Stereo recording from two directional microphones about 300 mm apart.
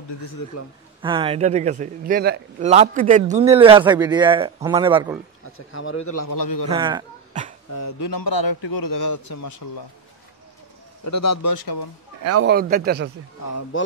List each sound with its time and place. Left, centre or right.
1.0 s a man's voice: centre
5.7 s speech: left
6.0 s speech: left
6.7 s a man's voice: centre
7.7 s speech: left
11.1 s a man's voice: left
12.2 s a man's voice: right
12.4 s a man's voice: right
13.5 s speech: left